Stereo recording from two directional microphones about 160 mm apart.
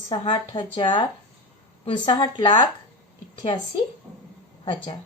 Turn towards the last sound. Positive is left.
turn(degrees=30)  # may be behind; listen again after turning